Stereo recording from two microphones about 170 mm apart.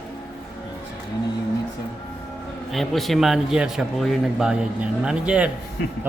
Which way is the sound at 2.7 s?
Centre (ahead or behind).